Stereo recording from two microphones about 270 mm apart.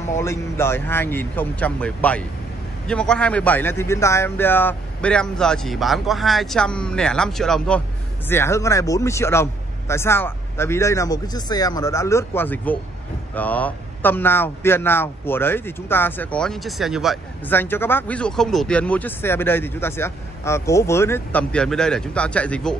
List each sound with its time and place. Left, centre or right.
0.1 s a man's voice: centre